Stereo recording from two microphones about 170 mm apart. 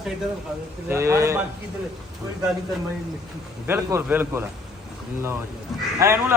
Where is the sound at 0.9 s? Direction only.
15° right (ahead or behind).